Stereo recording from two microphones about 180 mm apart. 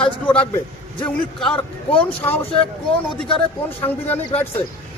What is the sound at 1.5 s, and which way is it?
Speech, 30° left (ahead or behind).